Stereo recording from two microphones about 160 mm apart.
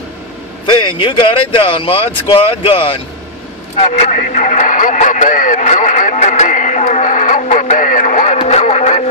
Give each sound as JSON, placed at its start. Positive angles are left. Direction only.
{"t": 0.7, "sound": "speech", "side_deg": 30}
{"t": 3.7, "sound": "radio", "side_deg": 40}